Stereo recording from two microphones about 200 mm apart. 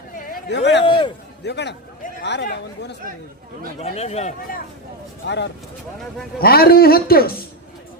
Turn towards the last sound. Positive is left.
turn(degrees=50)  # may be behind; listen again after turning